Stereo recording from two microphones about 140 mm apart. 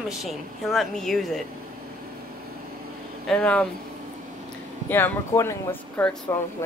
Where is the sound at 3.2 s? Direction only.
10° left (ahead or behind).